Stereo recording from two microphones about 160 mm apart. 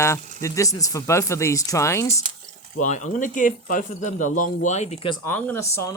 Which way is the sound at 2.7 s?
50° left (ahead or behind).